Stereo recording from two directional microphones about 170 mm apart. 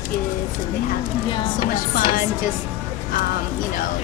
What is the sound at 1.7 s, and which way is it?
Speech, 55° left (ahead or behind).